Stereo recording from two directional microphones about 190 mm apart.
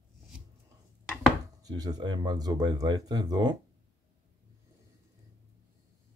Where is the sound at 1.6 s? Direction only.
20° right (ahead or behind).